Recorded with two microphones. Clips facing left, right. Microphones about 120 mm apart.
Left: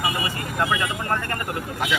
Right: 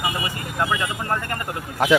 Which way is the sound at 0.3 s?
20° right (ahead or behind).